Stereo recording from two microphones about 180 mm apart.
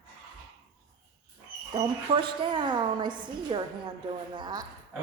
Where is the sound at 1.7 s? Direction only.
30° right (ahead or behind).